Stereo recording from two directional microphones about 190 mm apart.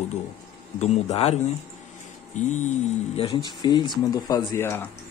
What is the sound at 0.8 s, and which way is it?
Speech, 35° left (ahead or behind).